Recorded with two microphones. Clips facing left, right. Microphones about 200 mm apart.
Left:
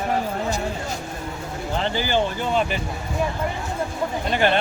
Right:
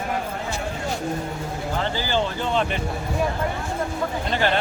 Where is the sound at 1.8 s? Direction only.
15° left (ahead or behind).